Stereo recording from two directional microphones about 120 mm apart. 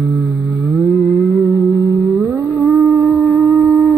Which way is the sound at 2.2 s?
15° right (ahead or behind).